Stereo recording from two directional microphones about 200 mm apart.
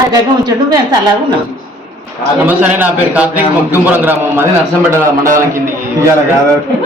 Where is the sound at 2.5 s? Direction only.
5° right (ahead or behind).